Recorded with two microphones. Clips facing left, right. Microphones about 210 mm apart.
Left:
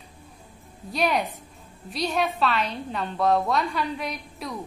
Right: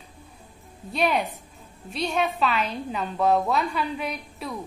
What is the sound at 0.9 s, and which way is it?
A woman's voice, centre (ahead or behind).